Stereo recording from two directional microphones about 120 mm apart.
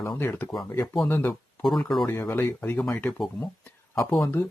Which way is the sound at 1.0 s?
20° left (ahead or behind).